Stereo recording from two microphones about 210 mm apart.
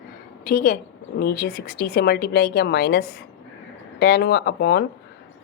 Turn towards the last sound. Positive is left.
turn(degrees=50)  # may be behind; listen again after turning